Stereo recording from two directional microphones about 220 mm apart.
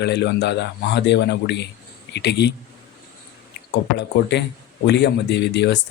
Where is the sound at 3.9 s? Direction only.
50° left (ahead or behind).